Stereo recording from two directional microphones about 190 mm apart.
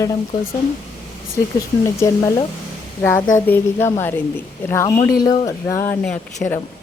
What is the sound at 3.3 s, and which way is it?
A woman's voice, 10° left (ahead or behind).